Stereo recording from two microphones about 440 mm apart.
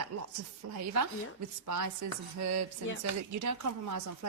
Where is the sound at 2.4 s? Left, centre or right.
Right.